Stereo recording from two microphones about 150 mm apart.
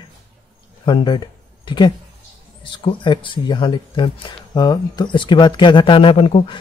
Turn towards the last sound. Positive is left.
turn(degrees=40)  # may be behind; listen again after turning